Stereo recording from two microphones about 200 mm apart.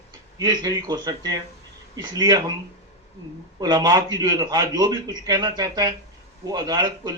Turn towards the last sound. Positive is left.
turn(degrees=-20)  # may be behind; listen again after turning